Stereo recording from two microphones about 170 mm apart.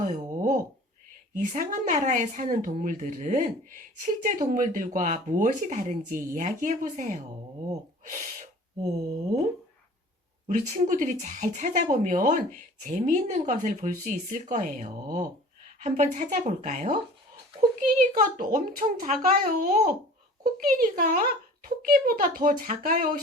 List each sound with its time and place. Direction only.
1.3 s speech: 50° right (ahead or behind)
7.7 s gasp: 50° right (ahead or behind)
10.4 s speech: 50° right (ahead or behind)